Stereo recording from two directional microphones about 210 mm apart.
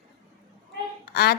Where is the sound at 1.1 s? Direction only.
50° left (ahead or behind).